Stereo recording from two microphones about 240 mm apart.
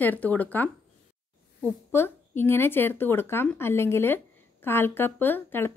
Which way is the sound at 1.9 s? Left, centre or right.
Centre.